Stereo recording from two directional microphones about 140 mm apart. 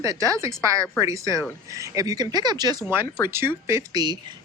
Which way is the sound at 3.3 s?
15° right (ahead or behind).